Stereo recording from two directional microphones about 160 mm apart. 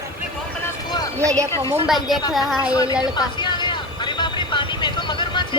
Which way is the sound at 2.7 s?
20° left (ahead or behind).